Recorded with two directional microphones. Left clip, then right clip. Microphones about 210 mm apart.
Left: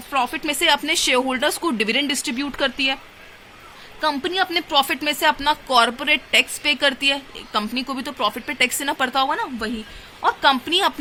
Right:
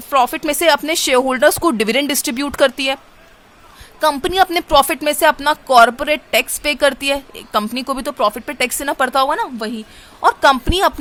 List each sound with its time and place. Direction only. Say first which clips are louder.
0.1 s speech: right 7 dB; 55° right (ahead or behind)
4.0 s a woman's voice: right 7 dB; 55° right (ahead or behind)